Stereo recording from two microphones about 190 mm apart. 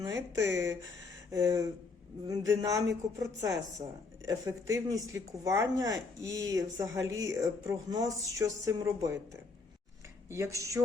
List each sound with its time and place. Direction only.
0.4 s speech: 15° right (ahead or behind)